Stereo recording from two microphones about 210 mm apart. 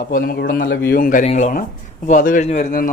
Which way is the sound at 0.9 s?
40° left (ahead or behind).